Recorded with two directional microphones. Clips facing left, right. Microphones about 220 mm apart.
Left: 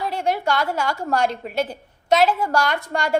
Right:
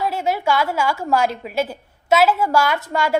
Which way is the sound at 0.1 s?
5° right (ahead or behind).